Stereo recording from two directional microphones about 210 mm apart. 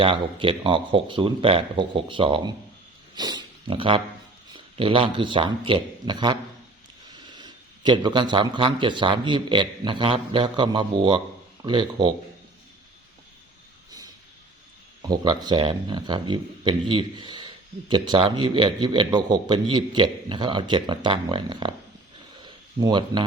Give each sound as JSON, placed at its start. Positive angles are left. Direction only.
{"t": 0.0, "sound": "speech", "side_deg": -25}
{"t": 7.3, "sound": "speech", "side_deg": -20}
{"t": 15.0, "sound": "speech", "side_deg": -20}
{"t": 22.4, "sound": "a sound", "side_deg": -20}